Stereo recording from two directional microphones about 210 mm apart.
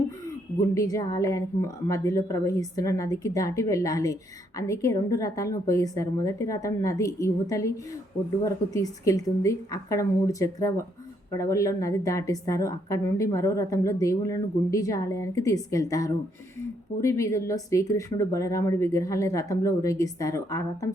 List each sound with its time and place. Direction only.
0.6 s a woman's voice: 15° left (ahead or behind)